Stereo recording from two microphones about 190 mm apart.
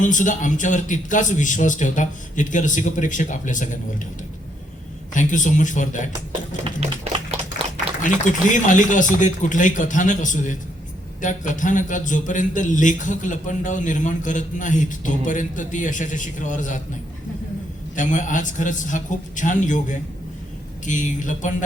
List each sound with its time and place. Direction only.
0.0 s a man's voice: 40° left (ahead or behind)
5.1 s a man's voice: 40° left (ahead or behind)
6.7 s tap: 35° right (ahead or behind)
8.0 s a man's voice: 40° left (ahead or behind)
17.9 s a man's voice: 40° left (ahead or behind)